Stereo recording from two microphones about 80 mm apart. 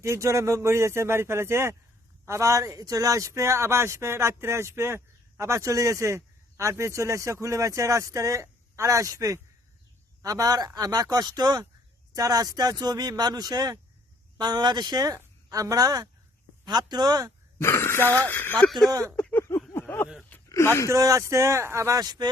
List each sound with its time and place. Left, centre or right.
0.0 s a man's voice: right
17.6 s speech: left
18.8 s speech: right
19.3 s a sound: left
20.3 s a sound: left
20.7 s speech: left
20.9 s a man's voice: right